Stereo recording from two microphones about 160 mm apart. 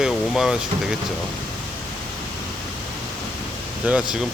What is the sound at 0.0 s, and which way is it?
Speech, 5° right (ahead or behind).